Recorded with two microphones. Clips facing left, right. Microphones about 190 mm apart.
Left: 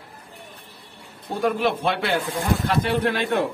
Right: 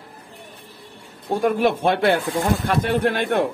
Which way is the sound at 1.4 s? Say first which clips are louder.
Right 3 dB; 50° right (ahead or behind).